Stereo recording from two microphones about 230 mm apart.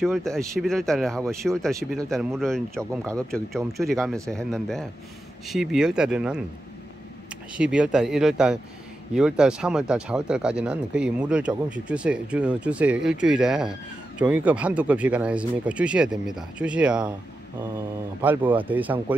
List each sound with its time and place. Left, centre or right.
0.0 s speech: centre
7.5 s speech: centre
18.2 s speech: centre